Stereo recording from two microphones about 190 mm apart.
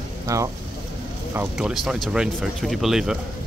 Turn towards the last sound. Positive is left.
turn(degrees=0)  # may be behind; listen again after turning